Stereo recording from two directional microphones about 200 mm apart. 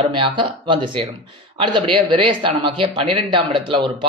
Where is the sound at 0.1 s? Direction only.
25° right (ahead or behind).